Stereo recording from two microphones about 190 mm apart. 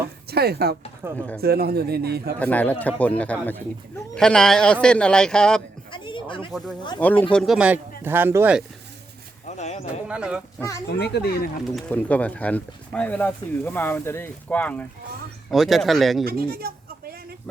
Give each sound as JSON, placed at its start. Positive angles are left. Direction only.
{"t": 0.3, "sound": "a man's voice", "side_deg": -55}
{"t": 1.0, "sound": "speech", "side_deg": -10}
{"t": 1.4, "sound": "a man's voice", "side_deg": -55}
{"t": 2.4, "sound": "speech", "side_deg": 10}
{"t": 5.9, "sound": "a sound", "side_deg": 25}
{"t": 7.0, "sound": "speech", "side_deg": 10}
{"t": 9.5, "sound": "horse", "side_deg": 35}
{"t": 10.1, "sound": "speech", "side_deg": -5}
{"t": 10.9, "sound": "speech", "side_deg": 60}
{"t": 11.6, "sound": "speech", "side_deg": 0}
{"t": 16.2, "sound": "speech", "side_deg": -55}